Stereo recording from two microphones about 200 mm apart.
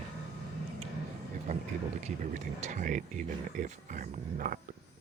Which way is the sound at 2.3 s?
35° right (ahead or behind).